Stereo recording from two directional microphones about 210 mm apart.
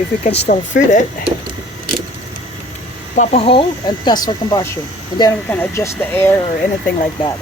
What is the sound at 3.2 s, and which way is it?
Speech, 25° left (ahead or behind).